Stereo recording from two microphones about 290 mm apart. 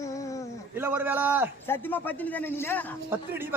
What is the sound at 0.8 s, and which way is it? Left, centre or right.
Speech, centre.